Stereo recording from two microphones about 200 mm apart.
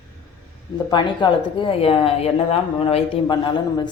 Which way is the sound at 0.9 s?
20° left (ahead or behind).